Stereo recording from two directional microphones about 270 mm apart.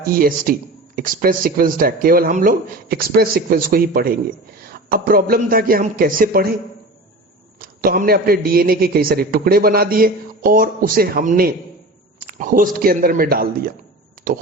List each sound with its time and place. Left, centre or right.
0.0 s speech: right
7.6 s speech: right